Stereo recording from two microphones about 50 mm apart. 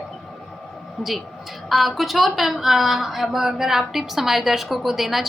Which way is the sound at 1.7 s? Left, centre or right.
Centre.